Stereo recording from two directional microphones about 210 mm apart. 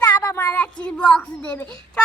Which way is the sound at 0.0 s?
10° left (ahead or behind).